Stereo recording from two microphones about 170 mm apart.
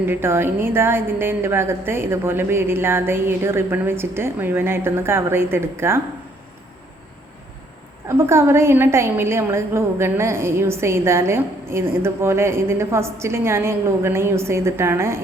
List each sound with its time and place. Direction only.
0.0 s a woman's voice: 15° right (ahead or behind)
8.0 s a woman's voice: 15° right (ahead or behind)